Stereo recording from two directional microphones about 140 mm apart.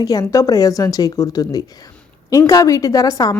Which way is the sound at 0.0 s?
25° left (ahead or behind).